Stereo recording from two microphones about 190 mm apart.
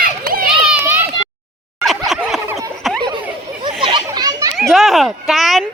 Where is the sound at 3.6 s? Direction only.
25° right (ahead or behind).